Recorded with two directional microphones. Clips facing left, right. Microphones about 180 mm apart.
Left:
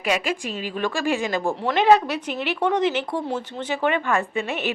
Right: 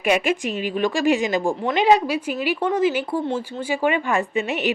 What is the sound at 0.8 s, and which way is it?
Speech, 15° right (ahead or behind).